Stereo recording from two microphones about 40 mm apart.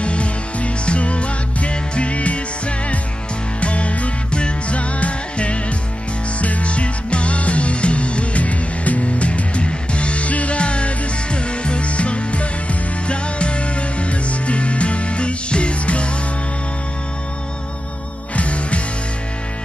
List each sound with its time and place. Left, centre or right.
0.0 s music: left
3.6 s music: left
18.3 s music: left